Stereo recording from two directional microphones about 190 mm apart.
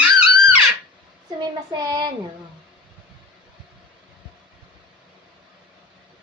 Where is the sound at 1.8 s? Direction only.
20° right (ahead or behind).